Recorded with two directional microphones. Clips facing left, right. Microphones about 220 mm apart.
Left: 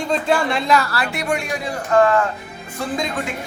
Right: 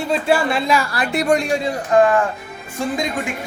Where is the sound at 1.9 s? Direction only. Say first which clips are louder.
Right 1 dB; 15° right (ahead or behind).